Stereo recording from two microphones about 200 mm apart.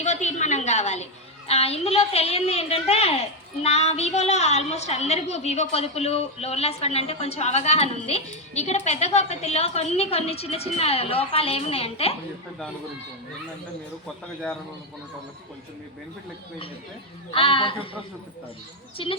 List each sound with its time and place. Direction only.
0.0 s a sound: 35° left (ahead or behind)
1.5 s a woman's voice: 30° left (ahead or behind)
17.3 s a man's voice: 25° left (ahead or behind)
19.0 s a man's voice: 25° left (ahead or behind)